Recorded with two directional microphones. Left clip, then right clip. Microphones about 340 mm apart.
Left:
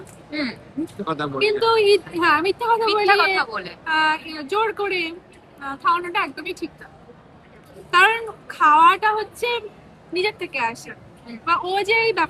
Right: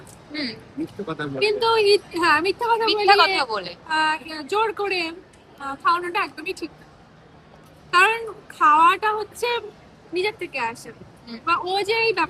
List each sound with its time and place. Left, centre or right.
1.0 s speech: centre
1.4 s a woman's voice: centre
7.9 s a woman's voice: centre